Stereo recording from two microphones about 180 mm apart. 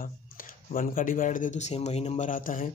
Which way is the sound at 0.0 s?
50° left (ahead or behind).